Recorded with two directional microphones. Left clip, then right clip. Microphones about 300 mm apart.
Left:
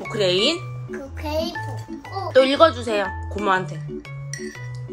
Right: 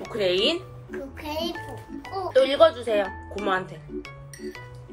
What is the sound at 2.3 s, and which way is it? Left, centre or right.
Speech, left.